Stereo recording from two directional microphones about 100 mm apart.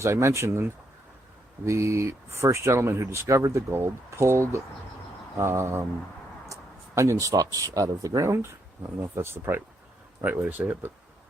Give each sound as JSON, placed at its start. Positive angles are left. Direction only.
{"t": 0.0, "sound": "speech", "side_deg": -30}